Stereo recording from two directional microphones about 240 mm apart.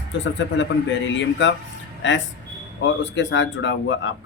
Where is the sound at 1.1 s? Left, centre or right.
Left.